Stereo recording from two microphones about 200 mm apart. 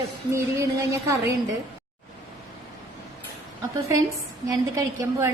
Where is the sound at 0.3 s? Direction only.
15° right (ahead or behind).